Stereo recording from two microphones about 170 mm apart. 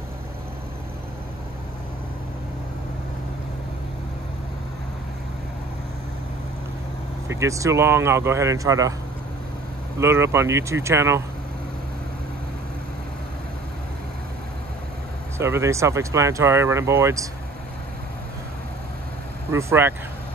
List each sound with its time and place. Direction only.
7.2 s speech: 15° right (ahead or behind)
9.9 s speech: 15° right (ahead or behind)
15.3 s speech: 15° right (ahead or behind)
19.5 s speech: 15° right (ahead or behind)